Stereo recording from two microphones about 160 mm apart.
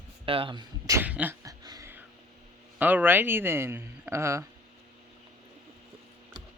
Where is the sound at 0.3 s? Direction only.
35° right (ahead or behind).